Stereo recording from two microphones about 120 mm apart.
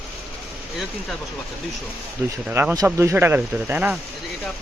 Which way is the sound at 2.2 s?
15° right (ahead or behind).